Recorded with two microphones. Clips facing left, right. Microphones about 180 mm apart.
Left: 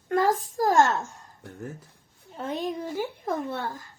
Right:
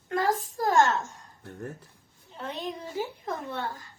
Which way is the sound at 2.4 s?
45° left (ahead or behind).